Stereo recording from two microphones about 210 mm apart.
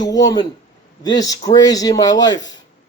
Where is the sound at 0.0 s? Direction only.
20° left (ahead or behind).